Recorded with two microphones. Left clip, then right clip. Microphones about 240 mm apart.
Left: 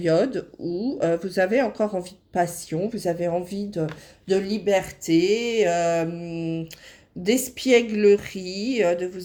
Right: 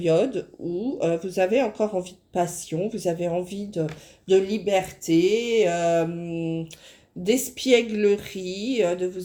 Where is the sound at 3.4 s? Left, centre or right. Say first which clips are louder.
Left 2 dB; left.